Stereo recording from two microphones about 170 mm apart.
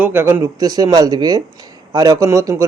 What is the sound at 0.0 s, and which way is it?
A man's voice, 10° right (ahead or behind).